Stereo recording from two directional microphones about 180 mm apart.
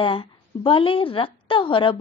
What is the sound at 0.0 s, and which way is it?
A woman's voice, 30° left (ahead or behind).